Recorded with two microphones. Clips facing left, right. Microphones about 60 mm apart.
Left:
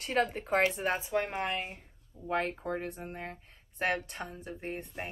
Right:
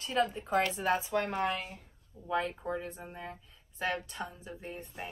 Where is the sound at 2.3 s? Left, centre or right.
Left.